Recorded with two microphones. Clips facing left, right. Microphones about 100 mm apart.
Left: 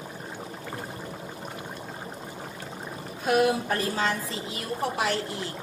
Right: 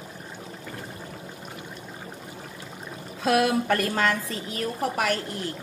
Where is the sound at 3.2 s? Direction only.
90° right; by 5.4 s 50° right (ahead or behind).